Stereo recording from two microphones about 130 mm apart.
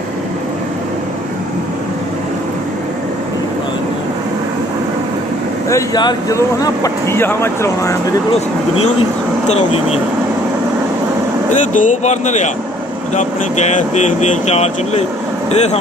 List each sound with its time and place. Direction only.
5.7 s speech: 25° left (ahead or behind)
9.5 s speech: 55° left (ahead or behind)
11.7 s speech: 75° left (ahead or behind)